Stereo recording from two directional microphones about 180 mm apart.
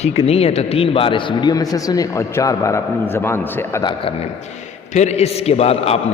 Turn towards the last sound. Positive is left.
turn(degrees=35)  # may be behind; listen again after turning